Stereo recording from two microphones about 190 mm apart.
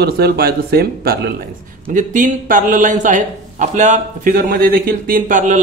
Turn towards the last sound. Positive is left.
turn(degrees=-40)  # may be behind; listen again after turning